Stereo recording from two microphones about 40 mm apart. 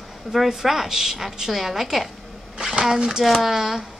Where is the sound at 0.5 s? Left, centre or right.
Centre.